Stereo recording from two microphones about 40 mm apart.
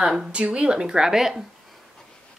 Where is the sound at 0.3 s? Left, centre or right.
Right; by 1.3 s centre.